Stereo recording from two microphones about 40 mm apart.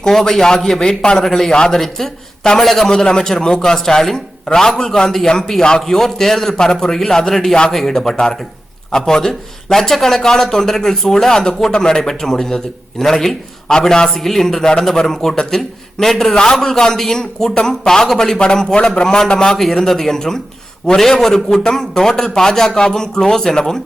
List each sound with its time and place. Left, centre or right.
0.0 s a man's voice: centre
7.9 s a man's voice: centre
14.1 s a man's voice: centre
19.0 s a man's voice: centre
19.5 s a man's voice: centre